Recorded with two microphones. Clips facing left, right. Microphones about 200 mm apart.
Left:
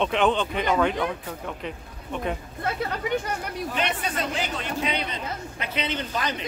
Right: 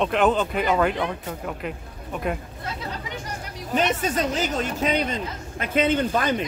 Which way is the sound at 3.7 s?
45° right (ahead or behind).